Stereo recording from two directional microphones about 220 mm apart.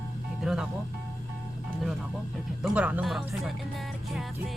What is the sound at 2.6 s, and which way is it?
Speech, 5° right (ahead or behind).